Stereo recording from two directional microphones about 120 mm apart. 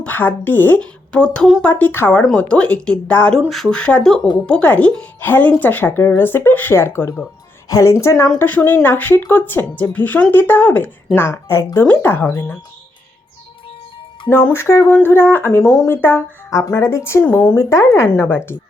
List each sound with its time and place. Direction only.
0.0 s speech: 15° left (ahead or behind)
14.3 s speech: 15° left (ahead or behind)